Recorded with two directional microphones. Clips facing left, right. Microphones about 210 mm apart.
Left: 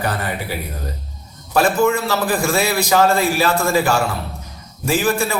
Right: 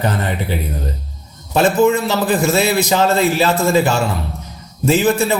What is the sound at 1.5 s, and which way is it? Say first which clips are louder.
A man's voice: right 3 dB; 20° right (ahead or behind).